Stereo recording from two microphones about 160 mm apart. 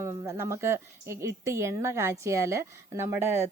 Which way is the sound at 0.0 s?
20° right (ahead or behind).